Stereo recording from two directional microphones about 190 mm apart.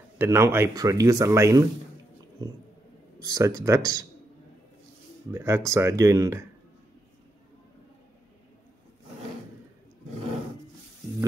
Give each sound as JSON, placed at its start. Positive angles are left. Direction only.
{"t": 0.2, "sound": "speech", "side_deg": -10}
{"t": 3.2, "sound": "speech", "side_deg": -15}
{"t": 5.3, "sound": "speech", "side_deg": -15}